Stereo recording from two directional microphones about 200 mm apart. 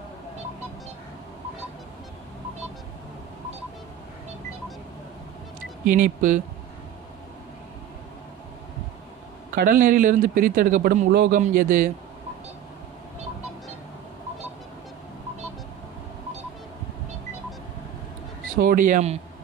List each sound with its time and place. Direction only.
5.9 s speech: 40° right (ahead or behind)
9.6 s a man's voice: 45° right (ahead or behind)
18.6 s speech: 45° right (ahead or behind)